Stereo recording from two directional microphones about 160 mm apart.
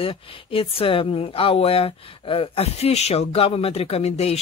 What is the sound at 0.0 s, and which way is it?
Speech, 35° left (ahead or behind).